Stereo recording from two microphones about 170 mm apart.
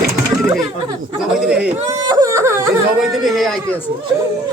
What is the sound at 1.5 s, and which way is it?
Wail, 5° right (ahead or behind).